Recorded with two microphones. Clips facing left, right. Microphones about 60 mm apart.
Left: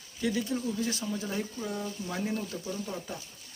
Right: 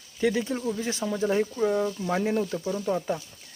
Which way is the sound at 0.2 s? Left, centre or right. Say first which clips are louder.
Right 5 dB; right.